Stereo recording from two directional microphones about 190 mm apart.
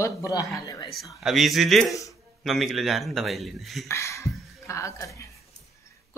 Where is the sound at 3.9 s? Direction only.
15° left (ahead or behind).